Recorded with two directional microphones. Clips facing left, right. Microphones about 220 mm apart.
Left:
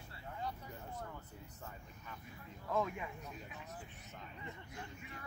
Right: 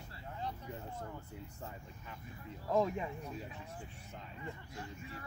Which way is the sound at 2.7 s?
35° right (ahead or behind).